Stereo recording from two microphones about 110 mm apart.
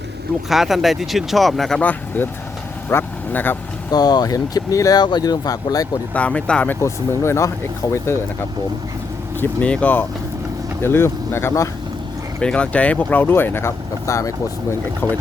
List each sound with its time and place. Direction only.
0.5 s speech: centre (ahead or behind)
1.8 s speech: 15° left (ahead or behind)
3.9 s speech: 35° left (ahead or behind)
6.1 s speech: 10° left (ahead or behind)
6.8 s speech: 25° left (ahead or behind)
9.4 s speech: 10° left (ahead or behind)
12.4 s speech: 10° left (ahead or behind)